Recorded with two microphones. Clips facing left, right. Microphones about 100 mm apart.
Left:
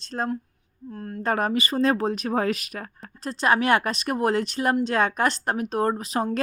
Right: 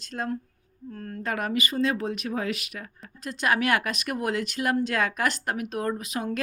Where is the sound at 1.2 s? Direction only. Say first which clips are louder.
Left 4 dB; 35° left (ahead or behind).